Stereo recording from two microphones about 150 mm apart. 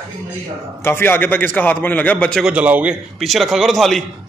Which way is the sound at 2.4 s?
10° right (ahead or behind).